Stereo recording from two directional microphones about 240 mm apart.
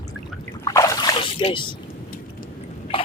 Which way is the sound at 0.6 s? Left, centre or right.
Centre.